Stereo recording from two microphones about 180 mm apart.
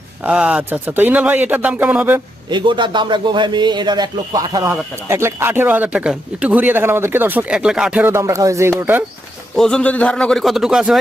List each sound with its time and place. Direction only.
0.2 s speech: 5° right (ahead or behind)
2.5 s a man's voice: 25° right (ahead or behind); by 9.0 s 10° right (ahead or behind)
9.6 s speech: 5° left (ahead or behind)